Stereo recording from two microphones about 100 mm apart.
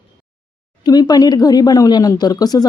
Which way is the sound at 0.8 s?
40° left (ahead or behind).